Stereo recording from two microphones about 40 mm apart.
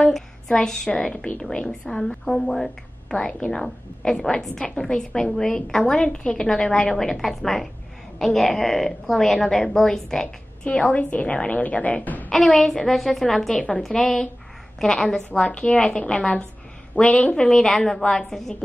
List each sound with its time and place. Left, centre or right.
0.0 s a sound: centre
0.6 s a woman's voice: centre
1.1 s a woman's voice: left; by 10.2 s centre
10.2 s a woman's voice: left
12.3 s a woman's voice: centre
13.6 s a woman's voice: left
13.8 s a woman's voice: centre